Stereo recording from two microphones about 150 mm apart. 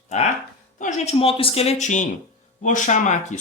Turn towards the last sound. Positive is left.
turn(degrees=55)  # may be behind; listen again after turning